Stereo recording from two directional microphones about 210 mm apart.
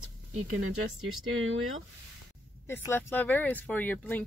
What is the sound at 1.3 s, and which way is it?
Speech, 70° right (ahead or behind).